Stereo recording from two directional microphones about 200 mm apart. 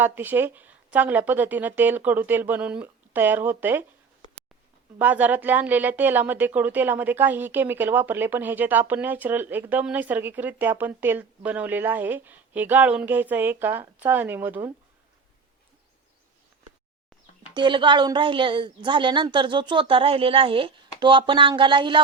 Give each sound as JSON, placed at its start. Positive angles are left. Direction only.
{"t": 0.0, "sound": "speech", "side_deg": -10}
{"t": 4.9, "sound": "speech", "side_deg": -10}
{"t": 17.5, "sound": "speech", "side_deg": -25}